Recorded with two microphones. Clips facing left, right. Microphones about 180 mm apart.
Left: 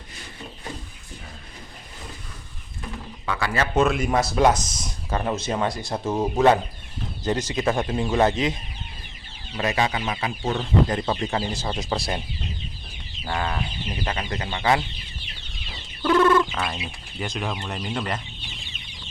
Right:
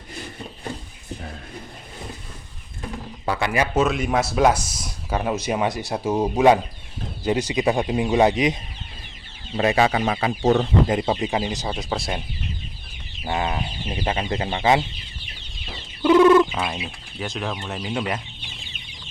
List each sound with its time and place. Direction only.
3.2 s speech: 20° right (ahead or behind)
3.8 s speech: centre (ahead or behind)
9.6 s speech: 30° right (ahead or behind)
10.8 s speech: 20° right (ahead or behind)
11.7 s speech: centre (ahead or behind)
13.2 s speech: 20° right (ahead or behind)
16.0 s bird: 15° right (ahead or behind)
16.6 s speech: centre (ahead or behind)